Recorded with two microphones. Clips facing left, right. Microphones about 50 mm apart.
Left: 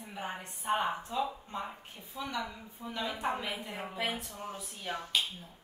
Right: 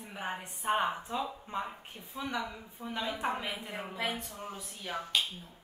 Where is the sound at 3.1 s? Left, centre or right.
Centre.